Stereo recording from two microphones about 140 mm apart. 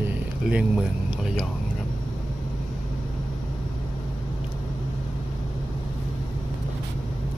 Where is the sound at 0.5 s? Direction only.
5° right (ahead or behind).